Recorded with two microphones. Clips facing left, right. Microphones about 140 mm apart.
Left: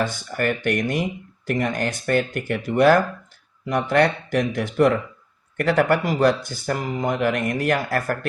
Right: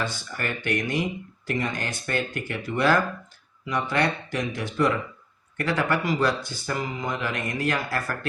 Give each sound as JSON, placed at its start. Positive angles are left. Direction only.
{"t": 0.0, "sound": "speech", "side_deg": 50}